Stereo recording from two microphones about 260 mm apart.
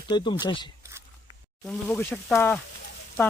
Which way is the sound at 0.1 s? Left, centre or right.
Centre.